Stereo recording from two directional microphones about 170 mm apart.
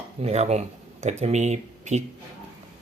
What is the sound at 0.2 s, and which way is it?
Speech, 40° right (ahead or behind).